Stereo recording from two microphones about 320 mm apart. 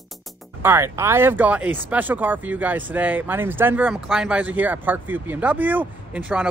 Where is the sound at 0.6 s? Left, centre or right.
Centre.